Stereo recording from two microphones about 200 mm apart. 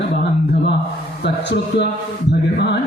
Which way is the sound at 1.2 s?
60° left (ahead or behind).